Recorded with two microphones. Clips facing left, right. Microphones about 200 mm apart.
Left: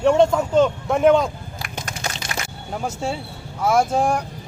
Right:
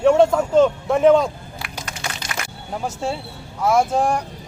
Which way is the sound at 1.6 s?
45° left (ahead or behind).